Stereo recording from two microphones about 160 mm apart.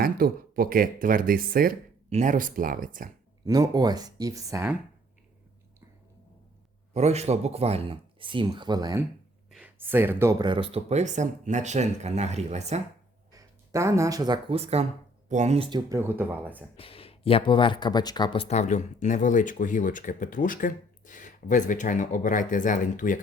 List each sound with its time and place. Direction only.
0.0 s speech: 65° right (ahead or behind)
2.0 s speech: 50° right (ahead or behind)
3.4 s speech: 25° right (ahead or behind)
6.9 s speech: 45° right (ahead or behind); by 9.0 s 25° right (ahead or behind)
9.5 s speech: 10° right (ahead or behind); by 12.8 s 45° right (ahead or behind)
13.3 s speech: 20° right (ahead or behind)
14.5 s speech: 40° right (ahead or behind)
15.9 s speech: 15° right (ahead or behind)
16.7 s speech: 35° left (ahead or behind); by 23.2 s 55° left (ahead or behind)